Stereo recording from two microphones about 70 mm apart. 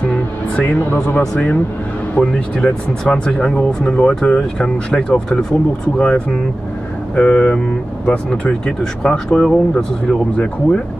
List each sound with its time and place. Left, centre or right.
0.1 s speech: centre